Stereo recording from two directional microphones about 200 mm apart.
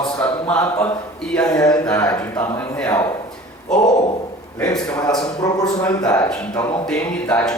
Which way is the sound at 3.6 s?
40° left (ahead or behind).